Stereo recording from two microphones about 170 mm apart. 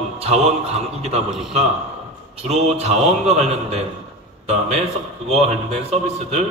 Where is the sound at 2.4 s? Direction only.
40° right (ahead or behind).